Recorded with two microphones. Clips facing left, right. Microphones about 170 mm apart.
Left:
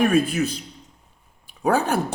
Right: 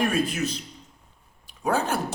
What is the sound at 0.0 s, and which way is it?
Speech, 60° left (ahead or behind).